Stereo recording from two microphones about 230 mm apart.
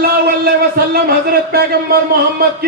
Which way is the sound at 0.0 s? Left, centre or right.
Right.